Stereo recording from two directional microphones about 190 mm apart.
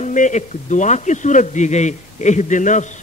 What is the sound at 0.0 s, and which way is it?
A man's voice, 40° left (ahead or behind).